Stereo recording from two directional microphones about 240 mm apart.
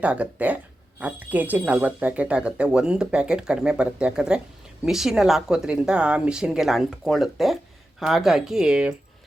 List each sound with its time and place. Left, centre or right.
0.0 s speech: centre